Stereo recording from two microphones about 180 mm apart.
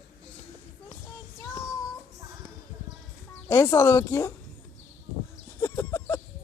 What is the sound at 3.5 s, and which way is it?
Speech, 15° left (ahead or behind).